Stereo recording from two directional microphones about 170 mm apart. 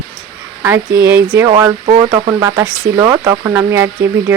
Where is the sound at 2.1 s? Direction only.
20° right (ahead or behind).